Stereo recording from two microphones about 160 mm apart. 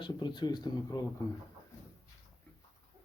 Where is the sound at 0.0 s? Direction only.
30° left (ahead or behind).